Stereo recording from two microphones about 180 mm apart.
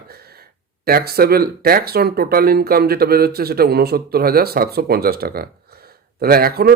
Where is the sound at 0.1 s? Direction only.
60° right (ahead or behind).